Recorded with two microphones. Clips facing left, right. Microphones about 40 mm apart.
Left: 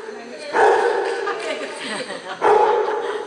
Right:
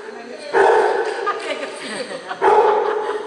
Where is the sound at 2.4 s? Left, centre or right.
Centre.